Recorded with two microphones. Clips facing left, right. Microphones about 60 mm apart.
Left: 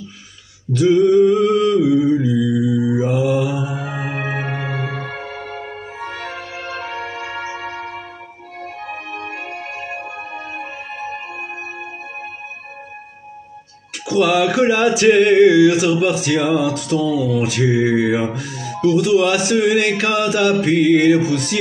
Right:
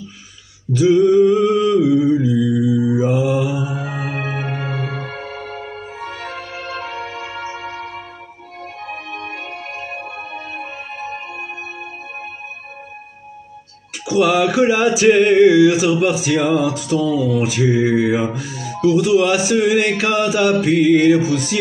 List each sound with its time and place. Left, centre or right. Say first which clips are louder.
0.7 s a sound: even; centre
4.3 s music: left 1 dB; centre
6.3 s music: even; centre
6.9 s music: left 1 dB; left
7.6 s music: left 1 dB; left
14.0 s a sound: even; centre